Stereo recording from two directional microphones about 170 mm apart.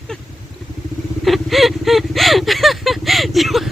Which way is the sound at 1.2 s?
Centre (ahead or behind).